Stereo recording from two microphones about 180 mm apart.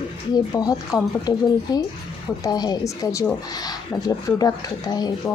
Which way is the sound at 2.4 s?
20° left (ahead or behind).